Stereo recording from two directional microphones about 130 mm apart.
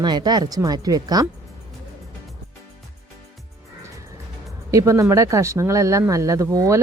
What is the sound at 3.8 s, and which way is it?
Music, 25° right (ahead or behind).